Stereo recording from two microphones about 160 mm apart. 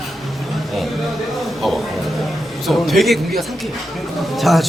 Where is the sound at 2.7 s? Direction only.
Centre (ahead or behind).